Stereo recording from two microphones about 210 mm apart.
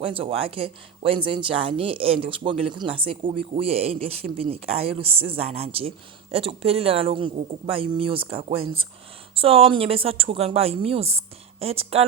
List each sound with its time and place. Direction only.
0.0 s speech: 25° right (ahead or behind)
8.6 s speech: 75° right (ahead or behind)
9.3 s speech: 25° right (ahead or behind)